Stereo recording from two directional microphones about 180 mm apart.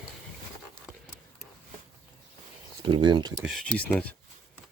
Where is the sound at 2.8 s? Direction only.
25° right (ahead or behind).